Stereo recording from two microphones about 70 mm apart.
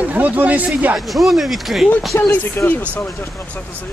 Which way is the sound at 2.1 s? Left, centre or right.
Left.